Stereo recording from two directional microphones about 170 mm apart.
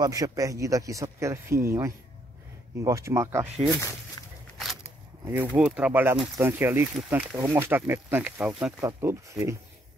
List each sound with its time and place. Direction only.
0.0 s a man's voice: 20° right (ahead or behind)
4.2 s a sound: 20° left (ahead or behind)
5.2 s speech: 10° right (ahead or behind)